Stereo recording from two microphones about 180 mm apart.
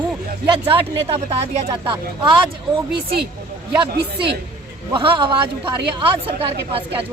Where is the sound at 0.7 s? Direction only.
30° right (ahead or behind).